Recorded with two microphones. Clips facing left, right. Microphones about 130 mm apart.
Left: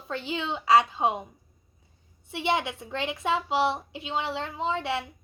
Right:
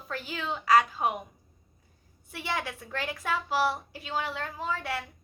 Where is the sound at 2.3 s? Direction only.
25° left (ahead or behind).